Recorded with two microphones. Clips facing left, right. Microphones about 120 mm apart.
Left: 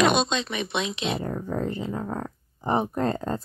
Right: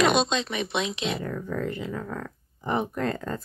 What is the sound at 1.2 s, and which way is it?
Speech, 30° left (ahead or behind).